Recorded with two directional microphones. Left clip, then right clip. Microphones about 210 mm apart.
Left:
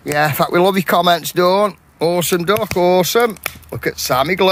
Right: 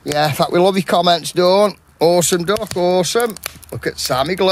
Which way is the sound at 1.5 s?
20° right (ahead or behind).